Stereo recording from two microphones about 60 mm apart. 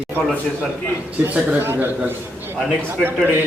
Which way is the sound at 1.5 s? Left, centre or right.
Right.